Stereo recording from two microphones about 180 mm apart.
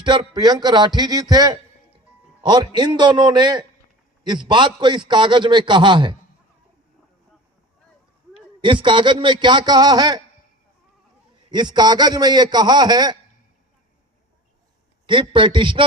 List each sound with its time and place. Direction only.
0.0 s a man's voice: 25° right (ahead or behind)
8.6 s a man's voice: 25° right (ahead or behind)
11.4 s a man's voice: 25° right (ahead or behind)
15.0 s a man's voice: 25° right (ahead or behind)